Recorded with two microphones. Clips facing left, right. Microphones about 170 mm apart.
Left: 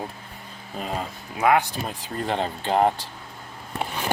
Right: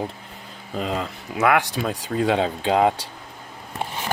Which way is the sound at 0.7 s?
90° right.